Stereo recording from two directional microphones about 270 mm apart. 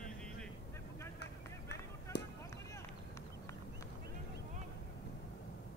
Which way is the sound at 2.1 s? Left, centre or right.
Left.